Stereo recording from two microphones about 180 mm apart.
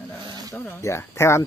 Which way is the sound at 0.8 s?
15° left (ahead or behind).